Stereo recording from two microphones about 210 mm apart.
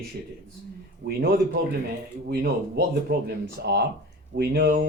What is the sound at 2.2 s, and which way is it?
Speech, 45° right (ahead or behind).